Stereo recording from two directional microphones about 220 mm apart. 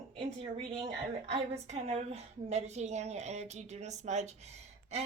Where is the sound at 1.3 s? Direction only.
30° right (ahead or behind).